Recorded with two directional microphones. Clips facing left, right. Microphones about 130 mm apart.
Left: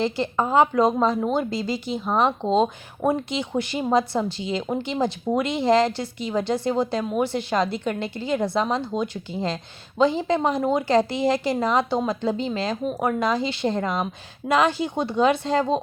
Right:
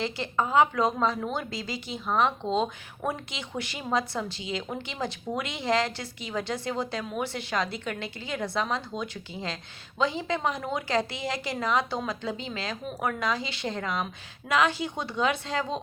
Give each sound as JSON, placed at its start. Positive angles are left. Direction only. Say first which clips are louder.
{"t": 0.0, "sound": "speech", "louder": "left 6 dB", "side_deg": 35}